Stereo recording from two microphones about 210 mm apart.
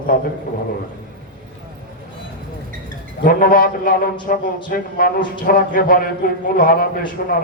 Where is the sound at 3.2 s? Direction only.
40° left (ahead or behind).